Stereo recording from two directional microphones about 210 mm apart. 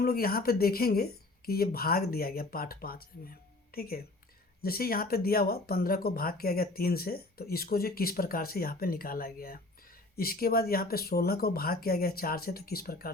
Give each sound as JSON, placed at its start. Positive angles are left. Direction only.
{"t": 0.0, "sound": "speech", "side_deg": 45}